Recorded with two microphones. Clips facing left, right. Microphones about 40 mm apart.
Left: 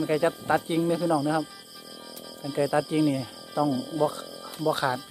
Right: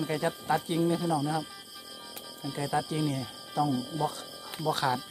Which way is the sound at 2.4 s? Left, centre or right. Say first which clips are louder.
Left 6 dB; centre.